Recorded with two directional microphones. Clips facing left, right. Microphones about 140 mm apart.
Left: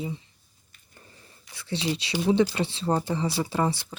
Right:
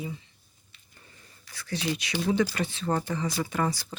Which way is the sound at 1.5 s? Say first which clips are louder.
Left 2 dB; 25° left (ahead or behind).